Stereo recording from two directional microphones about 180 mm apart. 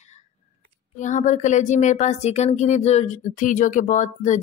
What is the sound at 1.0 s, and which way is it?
Speech, 45° left (ahead or behind).